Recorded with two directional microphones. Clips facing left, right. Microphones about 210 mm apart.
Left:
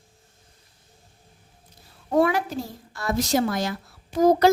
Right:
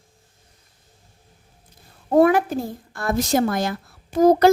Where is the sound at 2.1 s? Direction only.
50° right (ahead or behind).